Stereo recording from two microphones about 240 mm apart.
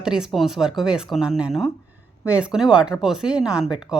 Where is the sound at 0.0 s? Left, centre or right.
Centre.